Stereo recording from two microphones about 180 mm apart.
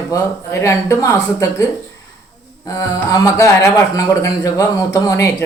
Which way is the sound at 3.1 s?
15° left (ahead or behind).